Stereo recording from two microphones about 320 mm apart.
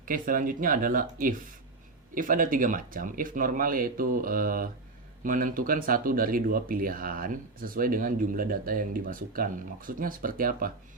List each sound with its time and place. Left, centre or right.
0.0 s speech: right